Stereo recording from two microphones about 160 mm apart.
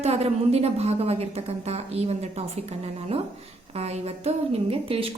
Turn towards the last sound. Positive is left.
turn(degrees=-35)  # may be behind; listen again after turning